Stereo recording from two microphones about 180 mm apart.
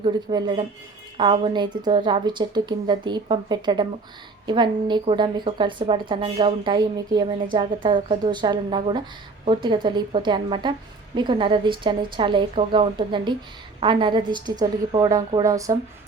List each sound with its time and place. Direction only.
0.0 s a woman's voice: 25° right (ahead or behind)